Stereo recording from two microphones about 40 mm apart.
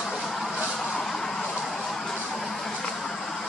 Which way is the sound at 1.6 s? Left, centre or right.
Centre.